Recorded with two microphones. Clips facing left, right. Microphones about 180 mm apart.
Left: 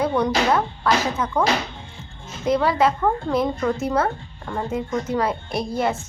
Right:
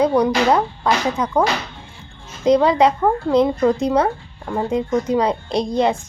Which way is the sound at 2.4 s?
20° right (ahead or behind).